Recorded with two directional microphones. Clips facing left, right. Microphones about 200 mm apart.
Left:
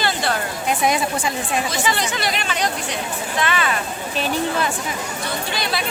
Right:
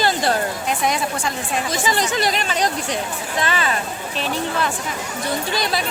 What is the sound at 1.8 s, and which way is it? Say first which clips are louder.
Speech: right 2 dB; 40° right (ahead or behind).